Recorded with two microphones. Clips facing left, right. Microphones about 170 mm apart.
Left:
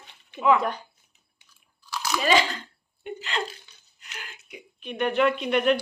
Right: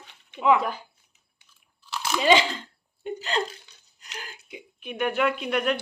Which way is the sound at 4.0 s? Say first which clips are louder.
Right 3 dB; 35° right (ahead or behind).